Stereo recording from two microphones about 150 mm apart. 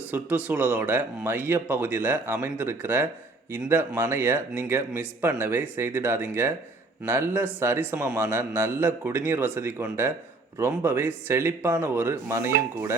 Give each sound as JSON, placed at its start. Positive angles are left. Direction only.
{"t": 0.1, "sound": "speech", "side_deg": -10}